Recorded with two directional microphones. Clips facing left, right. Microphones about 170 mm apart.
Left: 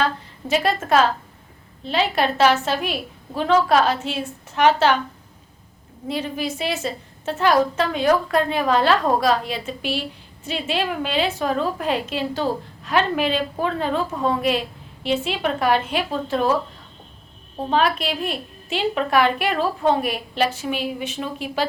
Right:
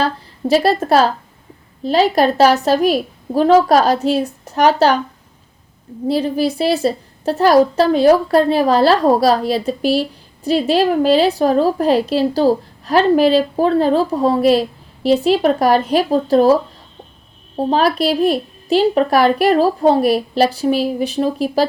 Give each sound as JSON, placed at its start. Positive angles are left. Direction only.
{"t": 0.0, "sound": "a woman's voice", "side_deg": -35}
{"t": 6.1, "sound": "a woman's voice", "side_deg": -35}
{"t": 17.6, "sound": "a woman's voice", "side_deg": -35}